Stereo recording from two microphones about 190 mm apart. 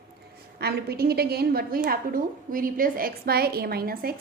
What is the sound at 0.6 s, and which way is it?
A woman's voice, 55° right (ahead or behind).